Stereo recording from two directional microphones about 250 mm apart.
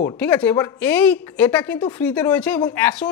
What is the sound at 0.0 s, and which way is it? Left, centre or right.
A woman's voice, centre.